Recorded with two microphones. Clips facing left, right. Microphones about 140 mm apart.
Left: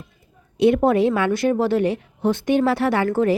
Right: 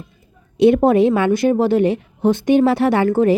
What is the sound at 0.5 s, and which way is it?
A woman's voice, 25° right (ahead or behind).